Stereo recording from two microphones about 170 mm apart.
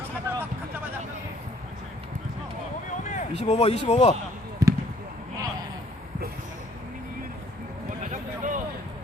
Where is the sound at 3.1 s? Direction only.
45° left (ahead or behind).